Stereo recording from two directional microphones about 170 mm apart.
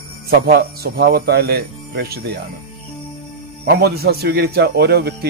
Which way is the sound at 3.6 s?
65° right (ahead or behind).